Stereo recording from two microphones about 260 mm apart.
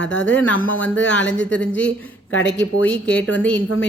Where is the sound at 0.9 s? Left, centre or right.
Left.